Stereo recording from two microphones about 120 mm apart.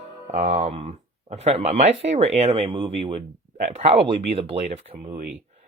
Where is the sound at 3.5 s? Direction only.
85° right.